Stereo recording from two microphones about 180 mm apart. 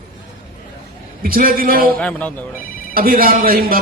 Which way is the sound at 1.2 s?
55° right (ahead or behind).